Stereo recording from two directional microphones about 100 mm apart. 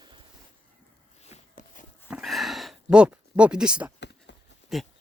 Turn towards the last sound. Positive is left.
turn(degrees=0)  # may be behind; listen again after turning